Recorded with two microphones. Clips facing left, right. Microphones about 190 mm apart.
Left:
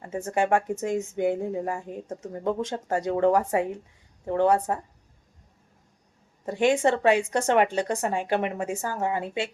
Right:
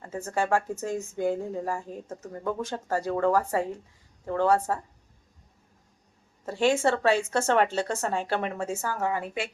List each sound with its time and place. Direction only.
0.3 s speech: 20° left (ahead or behind)
6.4 s speech: 15° left (ahead or behind)